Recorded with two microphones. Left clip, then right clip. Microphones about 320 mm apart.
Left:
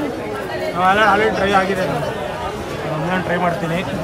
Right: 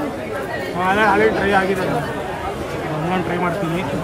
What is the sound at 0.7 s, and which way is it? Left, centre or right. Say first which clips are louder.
Speech: left 2 dB; left.